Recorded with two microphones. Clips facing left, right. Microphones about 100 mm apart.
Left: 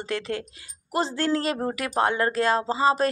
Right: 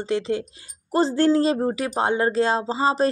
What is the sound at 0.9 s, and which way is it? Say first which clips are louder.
Speech: right 6 dB; 30° right (ahead or behind).